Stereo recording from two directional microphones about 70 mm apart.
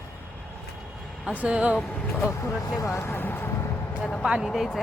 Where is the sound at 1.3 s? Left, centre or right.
Centre.